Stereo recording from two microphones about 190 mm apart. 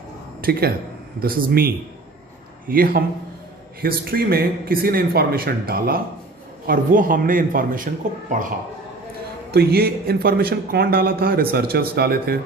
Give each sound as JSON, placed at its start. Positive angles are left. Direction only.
{"t": 0.4, "sound": "a man's voice", "side_deg": -50}
{"t": 9.5, "sound": "a man's voice", "side_deg": -55}